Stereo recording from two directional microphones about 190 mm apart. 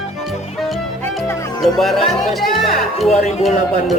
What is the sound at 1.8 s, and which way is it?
Speech, centre (ahead or behind).